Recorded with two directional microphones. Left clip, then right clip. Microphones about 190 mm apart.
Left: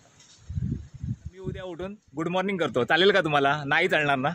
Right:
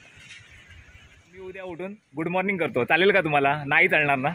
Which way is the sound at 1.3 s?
15° left (ahead or behind).